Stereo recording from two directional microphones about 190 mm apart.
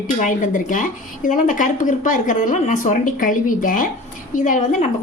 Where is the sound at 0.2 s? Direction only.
45° left (ahead or behind).